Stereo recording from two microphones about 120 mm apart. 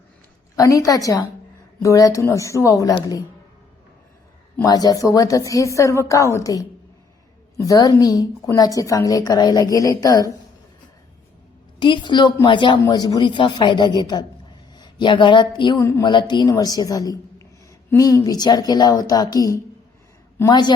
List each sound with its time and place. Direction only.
0.5 s a woman's voice: 25° left (ahead or behind)
4.6 s a woman's voice: 30° left (ahead or behind)
11.8 s a woman's voice: 40° left (ahead or behind)
15.8 s a woman's voice: 25° left (ahead or behind)
16.0 s a woman's voice: 40° left (ahead or behind)